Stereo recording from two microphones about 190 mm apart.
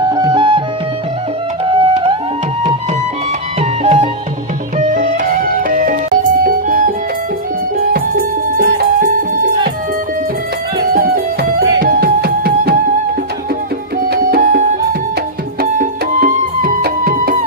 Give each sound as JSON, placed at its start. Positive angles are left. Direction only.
{"t": 0.0, "sound": "music", "side_deg": -20}
{"t": 1.6, "sound": "music", "side_deg": -30}
{"t": 3.8, "sound": "music", "side_deg": -35}
{"t": 10.9, "sound": "music", "side_deg": -50}
{"t": 14.0, "sound": "music", "side_deg": -50}